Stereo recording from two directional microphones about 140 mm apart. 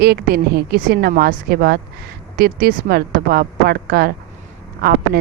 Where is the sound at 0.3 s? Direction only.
90° right.